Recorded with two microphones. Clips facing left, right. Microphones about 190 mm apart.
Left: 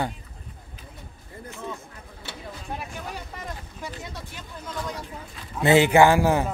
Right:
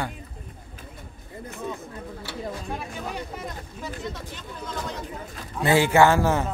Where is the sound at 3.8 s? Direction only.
10° left (ahead or behind).